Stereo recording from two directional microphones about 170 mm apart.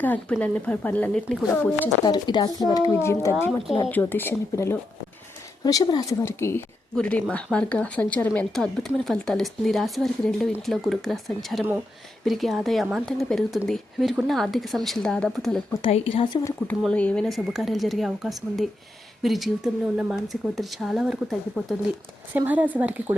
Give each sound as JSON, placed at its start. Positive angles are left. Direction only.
{"t": 0.0, "sound": "speech", "side_deg": 10}
{"t": 2.0, "sound": "speech", "side_deg": 25}
{"t": 15.8, "sound": "speech", "side_deg": 35}
{"t": 16.6, "sound": "speech", "side_deg": 10}